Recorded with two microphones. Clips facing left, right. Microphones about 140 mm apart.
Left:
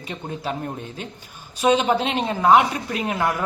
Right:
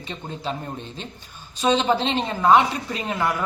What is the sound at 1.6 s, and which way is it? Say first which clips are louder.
Speech: left 1 dB; 10° left (ahead or behind).